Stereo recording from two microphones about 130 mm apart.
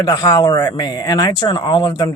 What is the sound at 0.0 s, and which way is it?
Speech, 30° left (ahead or behind).